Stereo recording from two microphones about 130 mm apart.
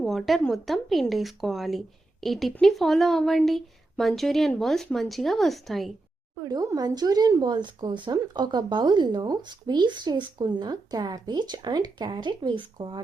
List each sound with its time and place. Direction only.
0.0 s a woman's voice: centre (ahead or behind)
6.4 s speech: 30° right (ahead or behind)